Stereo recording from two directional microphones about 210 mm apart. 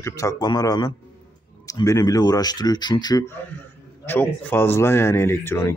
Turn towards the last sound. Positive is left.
turn(degrees=10)  # may be behind; listen again after turning